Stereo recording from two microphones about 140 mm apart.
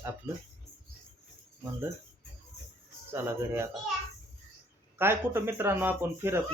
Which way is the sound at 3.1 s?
15° right (ahead or behind).